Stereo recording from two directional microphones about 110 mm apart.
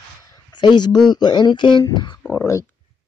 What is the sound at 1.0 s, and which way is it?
Speech, 40° left (ahead or behind).